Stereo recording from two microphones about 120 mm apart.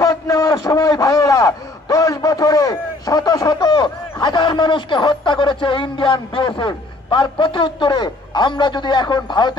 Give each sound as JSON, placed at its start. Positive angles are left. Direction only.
{"t": 0.0, "sound": "a man's voice", "side_deg": 30}